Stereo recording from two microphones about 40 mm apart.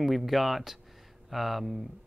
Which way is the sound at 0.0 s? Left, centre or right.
Centre.